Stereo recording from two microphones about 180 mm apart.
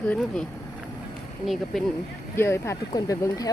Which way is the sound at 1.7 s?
Centre (ahead or behind).